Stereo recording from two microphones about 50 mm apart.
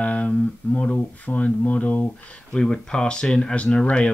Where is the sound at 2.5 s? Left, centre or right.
Centre.